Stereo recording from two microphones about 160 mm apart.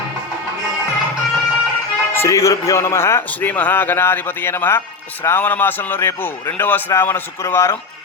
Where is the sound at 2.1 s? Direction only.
20° left (ahead or behind).